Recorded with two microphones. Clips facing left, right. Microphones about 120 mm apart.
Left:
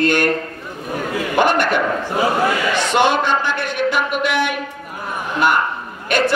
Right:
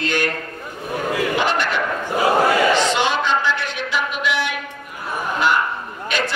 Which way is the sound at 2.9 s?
55° left (ahead or behind).